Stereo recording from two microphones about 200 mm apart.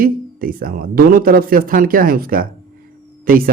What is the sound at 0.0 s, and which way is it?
Speech, 45° right (ahead or behind).